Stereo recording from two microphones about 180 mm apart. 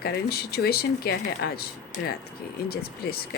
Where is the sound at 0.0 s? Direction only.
60° left (ahead or behind).